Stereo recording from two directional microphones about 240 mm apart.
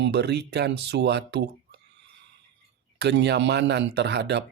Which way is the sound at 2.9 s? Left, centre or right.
Right.